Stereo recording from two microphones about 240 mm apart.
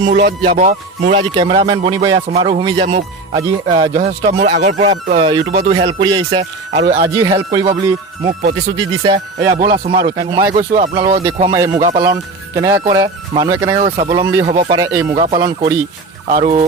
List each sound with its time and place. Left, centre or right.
0.3 s speech: right
8.3 s speech: right
9.0 s speech: centre